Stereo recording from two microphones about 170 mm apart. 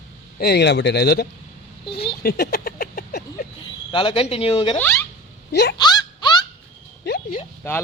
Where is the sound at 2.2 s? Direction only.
65° left (ahead or behind).